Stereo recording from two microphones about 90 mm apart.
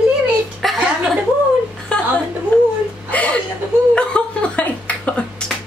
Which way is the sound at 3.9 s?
10° left (ahead or behind).